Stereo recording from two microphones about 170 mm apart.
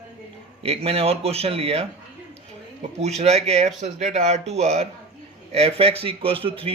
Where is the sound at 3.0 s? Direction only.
40° right (ahead or behind).